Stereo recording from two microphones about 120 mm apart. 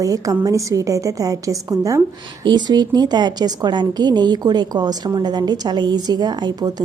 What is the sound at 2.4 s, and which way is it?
A woman's voice, 40° right (ahead or behind).